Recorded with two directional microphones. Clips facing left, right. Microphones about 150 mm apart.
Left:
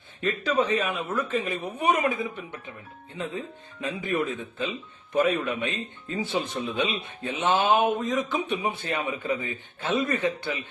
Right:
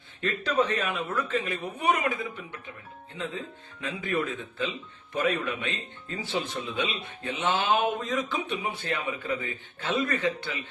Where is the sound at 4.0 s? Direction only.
20° left (ahead or behind).